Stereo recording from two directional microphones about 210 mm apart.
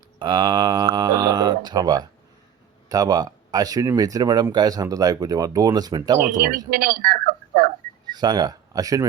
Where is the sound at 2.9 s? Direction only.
20° right (ahead or behind).